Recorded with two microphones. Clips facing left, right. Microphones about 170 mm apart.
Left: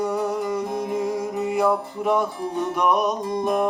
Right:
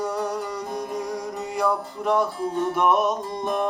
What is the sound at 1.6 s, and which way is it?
Music, 5° left (ahead or behind).